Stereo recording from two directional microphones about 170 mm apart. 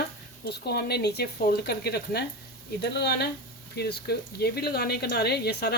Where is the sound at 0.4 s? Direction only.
70° left (ahead or behind).